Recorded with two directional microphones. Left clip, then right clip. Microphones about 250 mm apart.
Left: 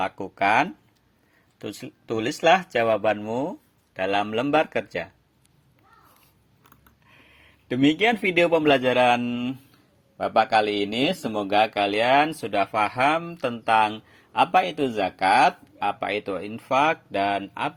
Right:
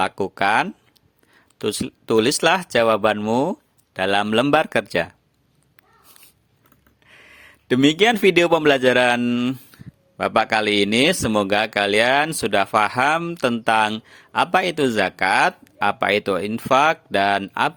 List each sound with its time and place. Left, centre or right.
0.0 s speech: right
7.1 s a man's voice: right